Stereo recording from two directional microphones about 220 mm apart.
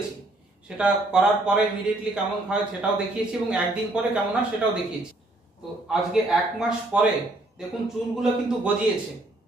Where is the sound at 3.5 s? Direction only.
5° right (ahead or behind).